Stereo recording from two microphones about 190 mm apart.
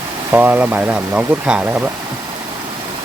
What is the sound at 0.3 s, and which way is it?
Speech, 10° right (ahead or behind).